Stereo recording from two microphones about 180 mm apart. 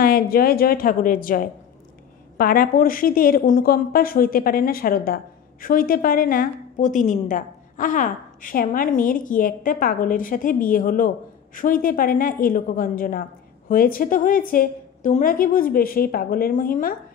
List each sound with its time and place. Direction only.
0.0 s a woman's voice: 55° left (ahead or behind)